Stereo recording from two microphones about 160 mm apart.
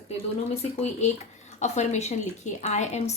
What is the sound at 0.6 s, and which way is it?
A woman's voice, 40° left (ahead or behind).